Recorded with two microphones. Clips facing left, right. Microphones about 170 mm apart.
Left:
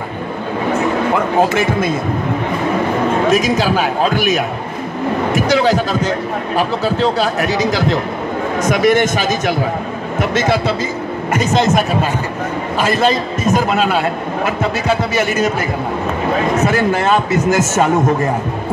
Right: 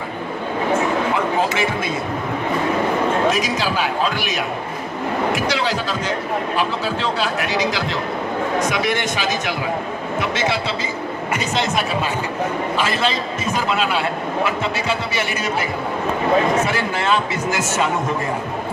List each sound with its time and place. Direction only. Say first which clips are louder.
1.1 s music: left 5 dB; 50° left (ahead or behind)
3.3 s a man's voice: left 6 dB; 50° left (ahead or behind)
16.6 s a man's voice: left 6 dB; 45° left (ahead or behind)